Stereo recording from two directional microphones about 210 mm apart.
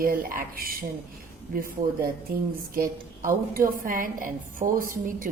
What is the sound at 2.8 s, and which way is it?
A woman's voice, 40° right (ahead or behind).